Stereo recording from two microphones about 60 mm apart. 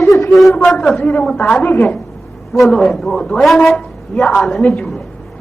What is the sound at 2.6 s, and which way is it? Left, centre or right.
A man's voice, centre.